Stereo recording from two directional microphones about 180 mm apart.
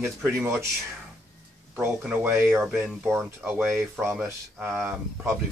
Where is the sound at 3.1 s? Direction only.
Centre (ahead or behind).